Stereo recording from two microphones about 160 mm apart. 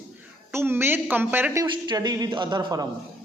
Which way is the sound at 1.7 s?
25° right (ahead or behind).